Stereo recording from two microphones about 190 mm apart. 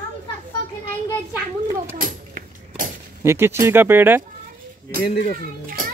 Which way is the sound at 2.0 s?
45° right (ahead or behind).